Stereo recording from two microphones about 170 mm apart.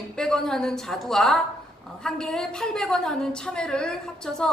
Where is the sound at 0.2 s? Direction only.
5° left (ahead or behind).